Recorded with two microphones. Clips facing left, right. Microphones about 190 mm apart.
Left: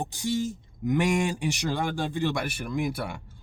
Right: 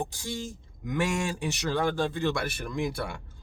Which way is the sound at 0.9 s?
15° left (ahead or behind).